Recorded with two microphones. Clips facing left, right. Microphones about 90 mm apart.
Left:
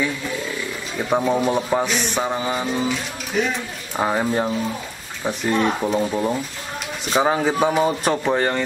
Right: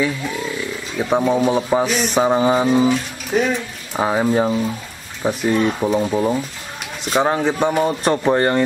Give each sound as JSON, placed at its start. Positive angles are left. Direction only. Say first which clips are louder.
{"t": 0.9, "sound": "a man's voice", "louder": "right 3 dB", "side_deg": 0}
{"t": 2.1, "sound": "mantra", "louder": "right 11 dB", "side_deg": -20}
{"t": 3.3, "sound": "speech", "louder": "right 4 dB", "side_deg": -40}
{"t": 3.9, "sound": "a man's voice", "louder": "right 3 dB", "side_deg": -5}